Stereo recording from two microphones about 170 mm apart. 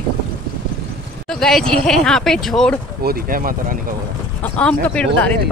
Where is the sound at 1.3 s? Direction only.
Centre (ahead or behind).